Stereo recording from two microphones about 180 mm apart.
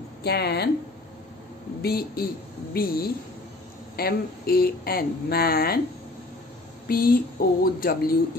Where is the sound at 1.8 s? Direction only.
60° left (ahead or behind).